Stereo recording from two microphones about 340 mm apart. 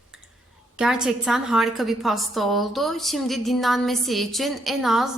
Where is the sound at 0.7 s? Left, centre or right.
Centre.